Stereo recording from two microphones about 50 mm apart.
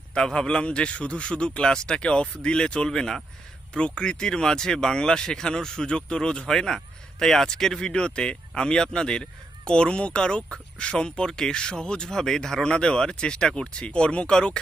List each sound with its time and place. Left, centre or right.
0.1 s a man's voice: centre